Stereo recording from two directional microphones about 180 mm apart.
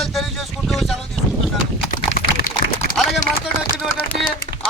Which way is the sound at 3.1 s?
Centre (ahead or behind).